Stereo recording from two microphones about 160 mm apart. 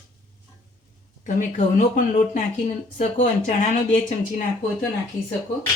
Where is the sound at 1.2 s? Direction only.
50° left (ahead or behind).